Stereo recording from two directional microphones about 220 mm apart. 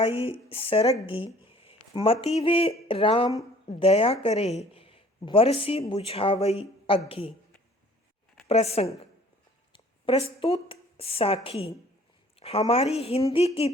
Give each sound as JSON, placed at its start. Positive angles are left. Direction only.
{"t": 0.0, "sound": "a woman's voice", "side_deg": 25}
{"t": 1.0, "sound": "a sound", "side_deg": 25}
{"t": 2.2, "sound": "a woman's voice", "side_deg": 25}
{"t": 8.4, "sound": "a woman's voice", "side_deg": 30}